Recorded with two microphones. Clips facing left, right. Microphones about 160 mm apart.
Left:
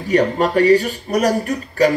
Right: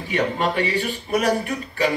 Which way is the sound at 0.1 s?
40° left (ahead or behind).